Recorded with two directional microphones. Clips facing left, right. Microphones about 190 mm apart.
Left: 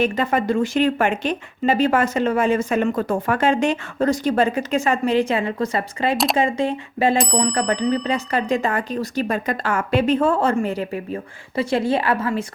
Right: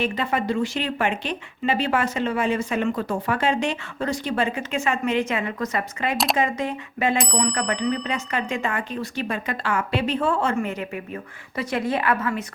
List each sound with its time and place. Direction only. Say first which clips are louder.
0.0 s speech: left 4 dB; 45° left (ahead or behind)
7.2 s bicycle bell: left 4 dB; centre (ahead or behind)
7.7 s speech: left 4 dB; 40° left (ahead or behind)